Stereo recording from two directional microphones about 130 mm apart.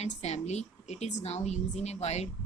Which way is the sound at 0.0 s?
55° left (ahead or behind).